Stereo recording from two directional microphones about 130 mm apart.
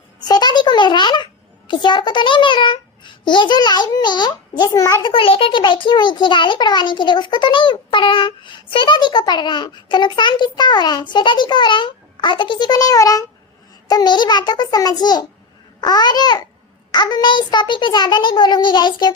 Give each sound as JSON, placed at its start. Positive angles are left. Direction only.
{"t": 0.2, "sound": "a child's voice", "side_deg": 30}
{"t": 5.0, "sound": "a child's voice", "side_deg": 45}